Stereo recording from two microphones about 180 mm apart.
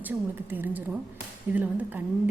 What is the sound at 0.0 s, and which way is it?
Speech, 10° right (ahead or behind).